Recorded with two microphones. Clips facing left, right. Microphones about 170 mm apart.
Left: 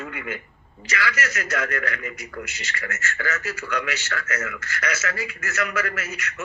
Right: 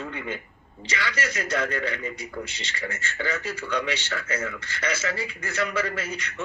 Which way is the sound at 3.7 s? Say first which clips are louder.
Right 1 dB; 30° right (ahead or behind).